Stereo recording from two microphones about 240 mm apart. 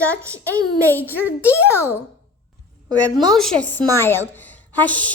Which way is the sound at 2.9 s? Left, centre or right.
Centre.